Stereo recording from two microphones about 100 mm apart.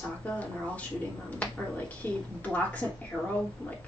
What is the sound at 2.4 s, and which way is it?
Speech, 15° left (ahead or behind).